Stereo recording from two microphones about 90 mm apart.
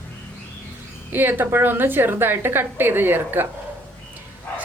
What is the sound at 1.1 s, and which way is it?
A woman's voice, 20° right (ahead or behind).